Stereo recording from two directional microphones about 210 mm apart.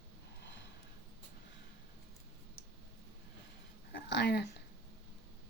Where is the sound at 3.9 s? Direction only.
55° left (ahead or behind).